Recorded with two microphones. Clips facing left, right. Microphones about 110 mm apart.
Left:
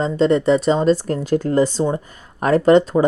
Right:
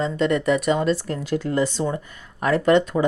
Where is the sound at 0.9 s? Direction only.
45° left (ahead or behind).